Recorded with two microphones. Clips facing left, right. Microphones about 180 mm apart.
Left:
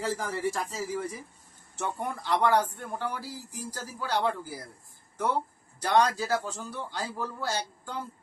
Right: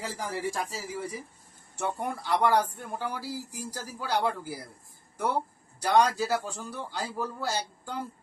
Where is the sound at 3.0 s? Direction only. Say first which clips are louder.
Right 3 dB; 10° right (ahead or behind).